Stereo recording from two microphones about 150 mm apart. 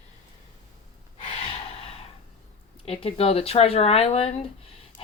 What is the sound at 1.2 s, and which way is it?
Gasp, 40° left (ahead or behind).